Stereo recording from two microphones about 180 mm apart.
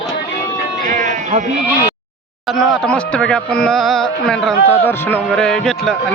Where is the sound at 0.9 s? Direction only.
45° right (ahead or behind).